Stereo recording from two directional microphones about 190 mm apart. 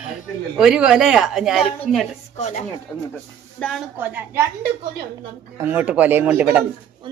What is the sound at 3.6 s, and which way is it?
Speech, centre (ahead or behind).